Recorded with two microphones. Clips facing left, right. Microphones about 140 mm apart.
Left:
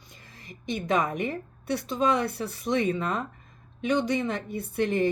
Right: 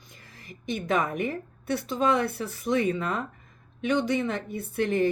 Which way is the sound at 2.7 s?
20° left (ahead or behind).